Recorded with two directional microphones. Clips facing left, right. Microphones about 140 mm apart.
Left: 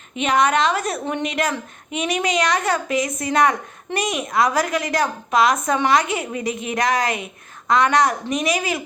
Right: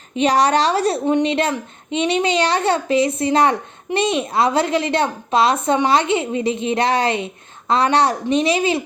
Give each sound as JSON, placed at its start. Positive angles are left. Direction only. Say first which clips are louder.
{"t": 0.2, "sound": "a woman's voice", "louder": "right 3 dB", "side_deg": -35}